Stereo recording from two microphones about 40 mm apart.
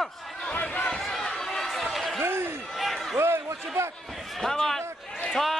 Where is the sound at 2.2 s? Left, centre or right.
Right.